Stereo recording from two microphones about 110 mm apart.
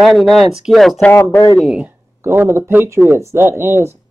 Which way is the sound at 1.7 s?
20° right (ahead or behind).